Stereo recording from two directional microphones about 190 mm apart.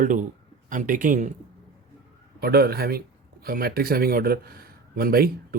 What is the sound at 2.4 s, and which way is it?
A man's voice, 55° right (ahead or behind).